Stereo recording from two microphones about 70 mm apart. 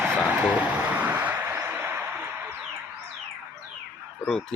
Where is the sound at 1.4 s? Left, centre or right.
Right.